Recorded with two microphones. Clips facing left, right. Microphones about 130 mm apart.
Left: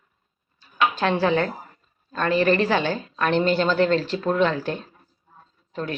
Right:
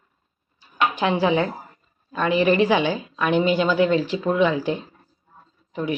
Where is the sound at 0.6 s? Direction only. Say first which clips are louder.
Even; 15° right (ahead or behind).